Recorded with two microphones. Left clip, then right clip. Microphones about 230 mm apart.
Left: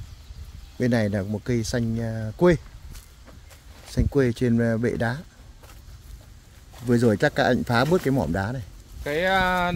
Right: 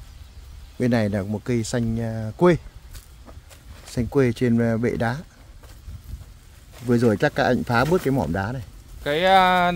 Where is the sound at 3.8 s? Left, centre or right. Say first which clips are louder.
Right 2 dB; centre.